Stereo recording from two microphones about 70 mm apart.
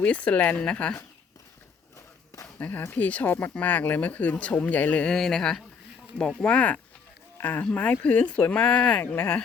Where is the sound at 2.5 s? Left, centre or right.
Left.